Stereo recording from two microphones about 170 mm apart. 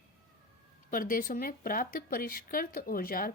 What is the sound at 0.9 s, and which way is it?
Speech, 55° left (ahead or behind).